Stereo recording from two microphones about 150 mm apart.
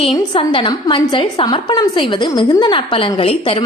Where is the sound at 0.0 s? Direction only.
40° left (ahead or behind).